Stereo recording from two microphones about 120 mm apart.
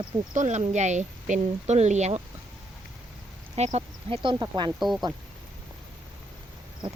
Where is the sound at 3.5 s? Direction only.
65° right (ahead or behind).